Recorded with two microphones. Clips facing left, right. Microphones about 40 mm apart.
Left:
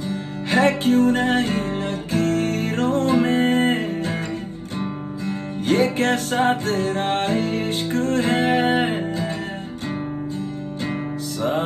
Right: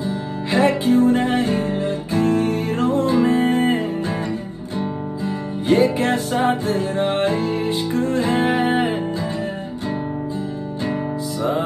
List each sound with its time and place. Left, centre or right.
0.0 s music: left
5.8 s music: left